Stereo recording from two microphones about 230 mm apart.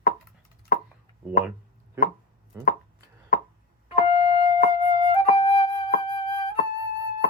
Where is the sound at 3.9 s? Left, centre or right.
Left.